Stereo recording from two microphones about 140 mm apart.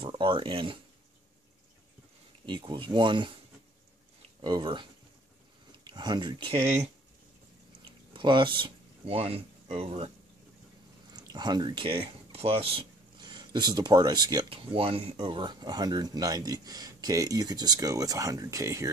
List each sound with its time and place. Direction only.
0.0 s speech: 40° right (ahead or behind)
2.4 s speech: 35° right (ahead or behind)
4.4 s speech: 35° right (ahead or behind)
7.8 s a sound: 35° right (ahead or behind)
11.1 s speech: 30° right (ahead or behind)